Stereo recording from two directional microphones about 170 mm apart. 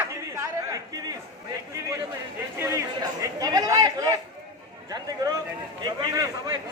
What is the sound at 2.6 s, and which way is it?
Chatter, 15° right (ahead or behind).